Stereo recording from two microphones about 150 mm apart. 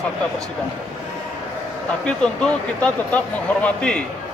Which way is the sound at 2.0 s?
5° left (ahead or behind).